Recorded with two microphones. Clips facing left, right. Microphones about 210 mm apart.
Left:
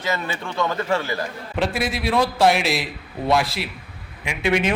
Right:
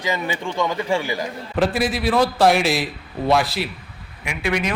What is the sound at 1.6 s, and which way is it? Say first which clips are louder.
A man's voice: right 3 dB; centre (ahead or behind).